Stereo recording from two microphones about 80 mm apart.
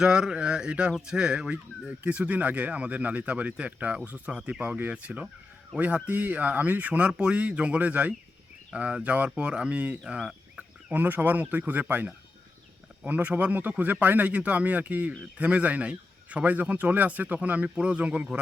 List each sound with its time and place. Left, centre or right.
0.0 s speech: centre
10.1 s fowl: centre
10.9 s speech: right